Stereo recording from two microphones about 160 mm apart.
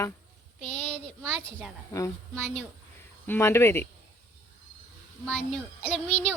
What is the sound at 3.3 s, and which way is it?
Speech, 15° left (ahead or behind).